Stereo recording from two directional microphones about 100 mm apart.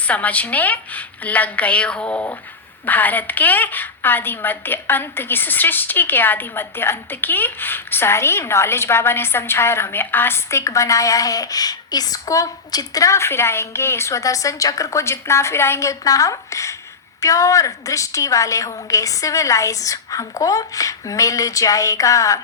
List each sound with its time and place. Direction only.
0.1 s a woman's voice: 15° left (ahead or behind); by 22.4 s 30° left (ahead or behind)